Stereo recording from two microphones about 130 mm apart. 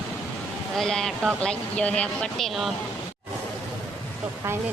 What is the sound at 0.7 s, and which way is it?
Speech, 5° left (ahead or behind).